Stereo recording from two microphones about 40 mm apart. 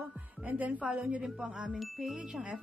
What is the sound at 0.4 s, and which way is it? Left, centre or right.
Music, right.